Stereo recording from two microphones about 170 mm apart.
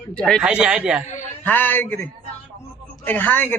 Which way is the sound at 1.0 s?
45° left (ahead or behind).